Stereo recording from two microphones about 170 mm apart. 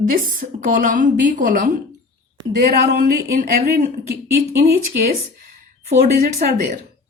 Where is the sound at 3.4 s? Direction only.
60° right (ahead or behind).